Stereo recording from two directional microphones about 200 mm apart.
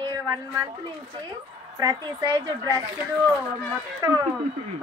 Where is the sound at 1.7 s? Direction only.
20° right (ahead or behind).